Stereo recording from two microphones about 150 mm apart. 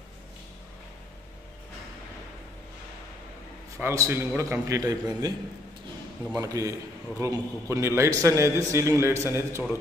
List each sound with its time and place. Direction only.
3.7 s a man's voice: 20° right (ahead or behind)
6.3 s a man's voice: 25° right (ahead or behind)